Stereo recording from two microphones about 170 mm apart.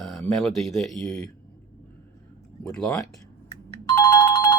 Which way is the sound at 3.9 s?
25° left (ahead or behind).